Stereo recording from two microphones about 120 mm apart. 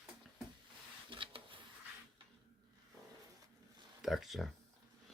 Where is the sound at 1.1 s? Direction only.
45° right (ahead or behind).